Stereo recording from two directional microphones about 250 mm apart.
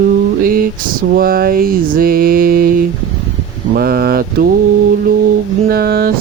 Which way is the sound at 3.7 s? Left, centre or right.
Right.